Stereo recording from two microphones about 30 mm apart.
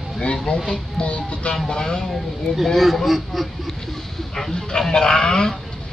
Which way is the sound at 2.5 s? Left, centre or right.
Left.